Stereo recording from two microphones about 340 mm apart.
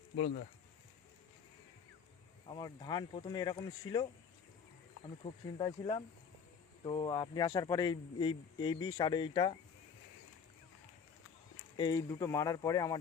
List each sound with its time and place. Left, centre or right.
2.6 s a man's voice: centre
5.2 s a man's voice: centre
11.8 s a man's voice: centre